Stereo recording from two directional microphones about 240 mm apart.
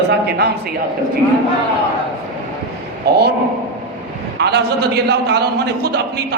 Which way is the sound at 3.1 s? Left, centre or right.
Right.